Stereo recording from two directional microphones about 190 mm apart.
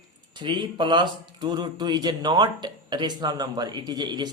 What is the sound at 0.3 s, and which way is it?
Speech, 25° right (ahead or behind).